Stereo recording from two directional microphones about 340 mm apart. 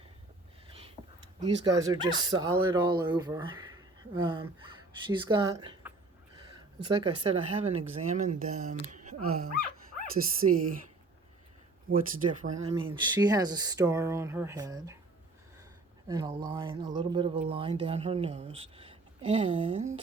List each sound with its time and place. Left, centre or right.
1.4 s speech: centre
8.9 s a sound: right
10.2 s speech: right
11.9 s speech: right
16.0 s speech: centre